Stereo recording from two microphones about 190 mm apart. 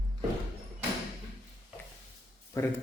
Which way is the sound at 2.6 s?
15° left (ahead or behind).